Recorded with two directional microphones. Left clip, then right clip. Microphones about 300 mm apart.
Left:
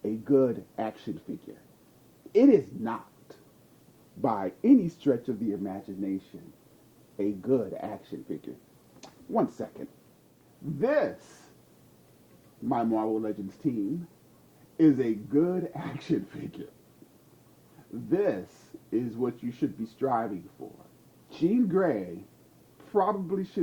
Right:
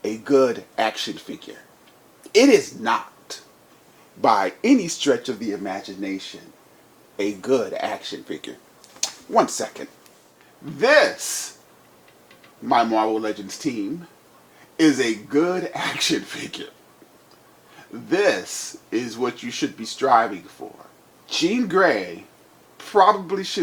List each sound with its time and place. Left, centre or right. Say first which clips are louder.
0.0 s speech: right 7 dB; centre
12.6 s speech: right 10 dB; centre
17.9 s speech: right 8 dB; centre
20.6 s speech: right 7 dB; centre
21.2 s speech: right 5 dB; centre